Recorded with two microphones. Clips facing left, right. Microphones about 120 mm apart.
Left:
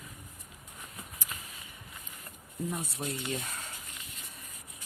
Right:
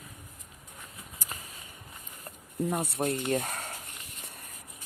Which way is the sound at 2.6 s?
60° right (ahead or behind).